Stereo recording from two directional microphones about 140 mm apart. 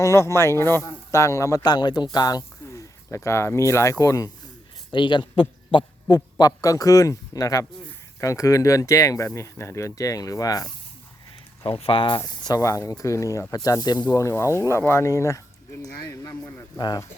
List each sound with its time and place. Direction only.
0.0 s speech: 20° left (ahead or behind)
11.8 s speech: 40° left (ahead or behind)